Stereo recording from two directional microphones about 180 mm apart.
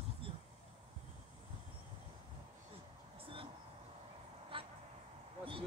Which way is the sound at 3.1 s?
30° right (ahead or behind).